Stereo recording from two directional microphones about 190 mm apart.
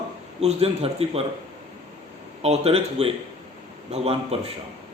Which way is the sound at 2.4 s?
30° right (ahead or behind).